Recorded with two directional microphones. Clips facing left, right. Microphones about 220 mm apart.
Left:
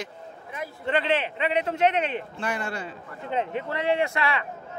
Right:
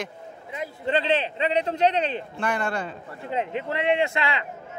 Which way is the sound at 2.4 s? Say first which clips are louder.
Right 5 dB; 55° right (ahead or behind).